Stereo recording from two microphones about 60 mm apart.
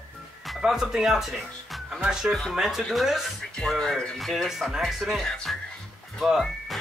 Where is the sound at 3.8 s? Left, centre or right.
Centre.